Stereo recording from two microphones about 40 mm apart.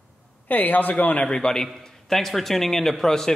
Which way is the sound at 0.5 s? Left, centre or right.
Left.